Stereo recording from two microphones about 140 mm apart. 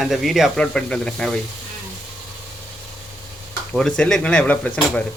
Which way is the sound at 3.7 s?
5° left (ahead or behind).